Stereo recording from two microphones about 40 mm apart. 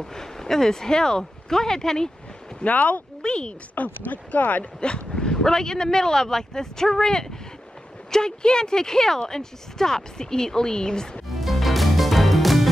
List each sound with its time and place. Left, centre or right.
0.0 s speech: centre
2.6 s speech: left
3.2 s speech: left
3.7 s speech: left
4.7 s speech: left
11.2 s music: centre